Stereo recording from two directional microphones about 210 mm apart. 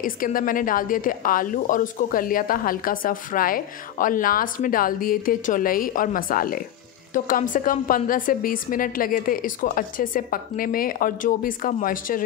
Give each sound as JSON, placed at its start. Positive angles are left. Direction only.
{"t": 0.0, "sound": "a woman's voice", "side_deg": 40}